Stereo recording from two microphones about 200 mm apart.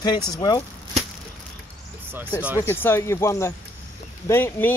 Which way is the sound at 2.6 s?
10° left (ahead or behind).